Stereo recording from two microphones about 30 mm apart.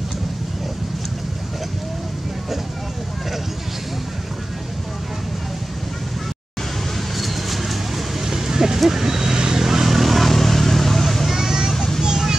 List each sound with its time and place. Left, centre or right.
7.2 s vehicle: centre
8.3 s vehicle: centre
11.3 s vehicle: centre